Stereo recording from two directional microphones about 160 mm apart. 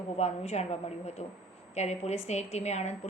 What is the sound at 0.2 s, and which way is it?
A woman's voice, 45° left (ahead or behind).